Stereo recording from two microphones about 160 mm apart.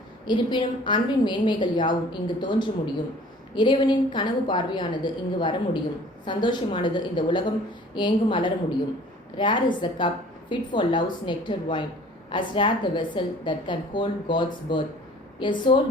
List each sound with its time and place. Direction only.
0.3 s a woman's voice: 30° left (ahead or behind)